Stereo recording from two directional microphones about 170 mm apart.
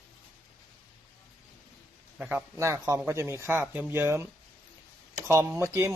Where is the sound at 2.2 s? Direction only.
5° right (ahead or behind).